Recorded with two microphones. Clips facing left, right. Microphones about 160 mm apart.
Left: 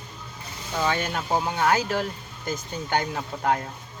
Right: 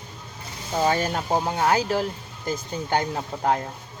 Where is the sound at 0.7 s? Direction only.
35° right (ahead or behind).